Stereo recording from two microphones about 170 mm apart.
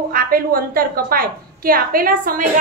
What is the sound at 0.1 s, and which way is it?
A woman's voice, 60° right (ahead or behind).